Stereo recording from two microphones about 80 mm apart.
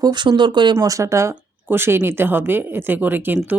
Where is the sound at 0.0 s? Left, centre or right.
Right.